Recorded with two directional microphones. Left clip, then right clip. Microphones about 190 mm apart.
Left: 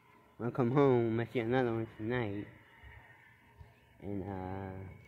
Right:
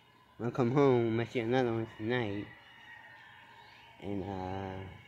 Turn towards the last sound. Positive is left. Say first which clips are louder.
# right 3 dB
turn(degrees=-10)  # may be behind; listen again after turning